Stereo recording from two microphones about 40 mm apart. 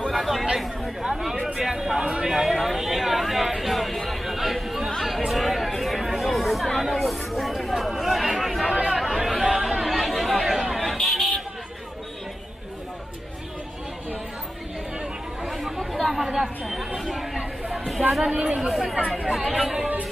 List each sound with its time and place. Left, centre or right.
0.6 s speech: centre
2.2 s chatter: centre
8.6 s chatter: right
9.0 s chatter: centre
11.1 s a sound: centre
15.4 s chatter: centre
17.7 s a sound: centre
18.3 s speech: right
18.7 s speech: centre